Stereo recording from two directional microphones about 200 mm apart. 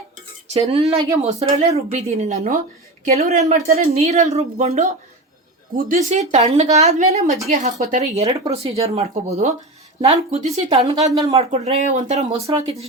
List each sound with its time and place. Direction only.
0.5 s speech: 30° right (ahead or behind)
3.9 s speech: 30° right (ahead or behind)
6.1 s speech: 35° right (ahead or behind)